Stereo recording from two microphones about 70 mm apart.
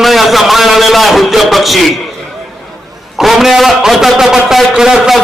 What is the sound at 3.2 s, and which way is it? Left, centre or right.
A man's voice, centre.